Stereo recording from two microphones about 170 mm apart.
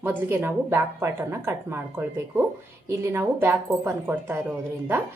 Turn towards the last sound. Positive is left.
turn(degrees=-10)  # may be behind; listen again after turning